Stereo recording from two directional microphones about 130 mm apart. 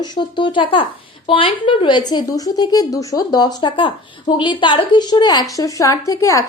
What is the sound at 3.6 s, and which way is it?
Speech, 40° left (ahead or behind).